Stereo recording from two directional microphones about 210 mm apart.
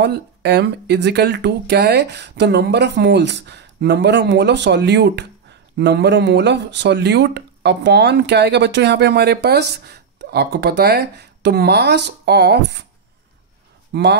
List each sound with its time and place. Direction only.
0.0 s speech: 55° right (ahead or behind)
13.9 s speech: 55° right (ahead or behind)